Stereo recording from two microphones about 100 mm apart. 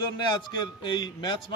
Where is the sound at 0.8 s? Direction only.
50° left (ahead or behind).